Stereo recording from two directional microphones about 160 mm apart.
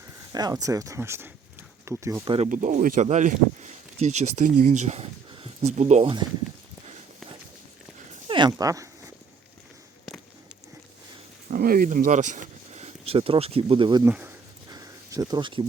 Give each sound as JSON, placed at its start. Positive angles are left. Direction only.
{"t": 0.3, "sound": "speech", "side_deg": -25}
{"t": 2.2, "sound": "speech", "side_deg": -35}
{"t": 2.5, "sound": "speech", "side_deg": -55}
{"t": 8.3, "sound": "dog", "side_deg": -30}
{"t": 11.5, "sound": "speech", "side_deg": -65}
{"t": 14.0, "sound": "speech", "side_deg": -10}
{"t": 14.7, "sound": "a sound", "side_deg": -20}